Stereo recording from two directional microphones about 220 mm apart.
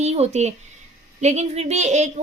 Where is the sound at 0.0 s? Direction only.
30° right (ahead or behind).